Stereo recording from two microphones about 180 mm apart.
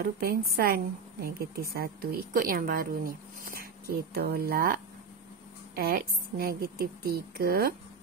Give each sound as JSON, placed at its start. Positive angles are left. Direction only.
{"t": 0.0, "sound": "a woman's voice", "side_deg": -60}
{"t": 5.8, "sound": "a woman's voice", "side_deg": -60}